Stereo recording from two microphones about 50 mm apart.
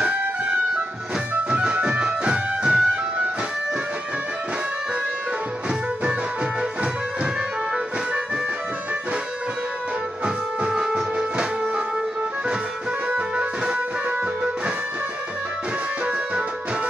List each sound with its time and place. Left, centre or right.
0.0 s music: right
10.2 s music: centre
16.1 s music: right